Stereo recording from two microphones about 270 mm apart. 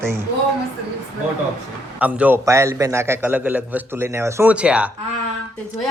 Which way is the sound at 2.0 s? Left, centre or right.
Centre.